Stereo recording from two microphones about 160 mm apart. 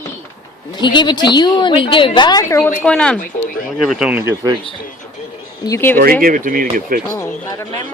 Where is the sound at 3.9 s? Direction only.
5° right (ahead or behind).